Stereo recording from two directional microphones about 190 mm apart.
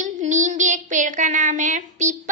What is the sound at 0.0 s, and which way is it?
Child singing, 40° right (ahead or behind).